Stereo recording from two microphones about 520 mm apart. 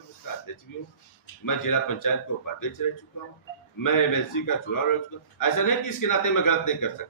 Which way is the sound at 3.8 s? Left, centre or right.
Left.